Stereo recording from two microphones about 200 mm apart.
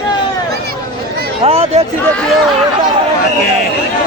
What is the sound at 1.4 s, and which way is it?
Speech, 30° right (ahead or behind).